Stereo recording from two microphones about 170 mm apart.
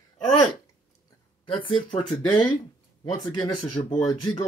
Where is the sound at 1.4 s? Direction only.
30° left (ahead or behind).